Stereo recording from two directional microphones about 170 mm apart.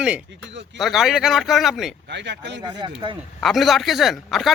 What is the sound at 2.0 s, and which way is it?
Speech, 90° right.